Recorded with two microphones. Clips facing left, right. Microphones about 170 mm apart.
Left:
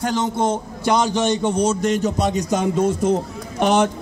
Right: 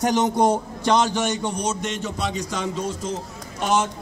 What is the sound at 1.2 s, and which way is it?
A man's voice, 30° left (ahead or behind).